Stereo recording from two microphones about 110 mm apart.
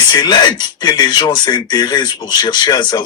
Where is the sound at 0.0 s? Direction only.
40° left (ahead or behind).